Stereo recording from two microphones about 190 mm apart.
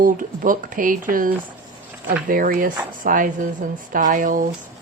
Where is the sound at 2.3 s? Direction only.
50° right (ahead or behind).